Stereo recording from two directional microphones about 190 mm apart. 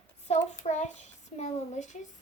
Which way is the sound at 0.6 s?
35° left (ahead or behind).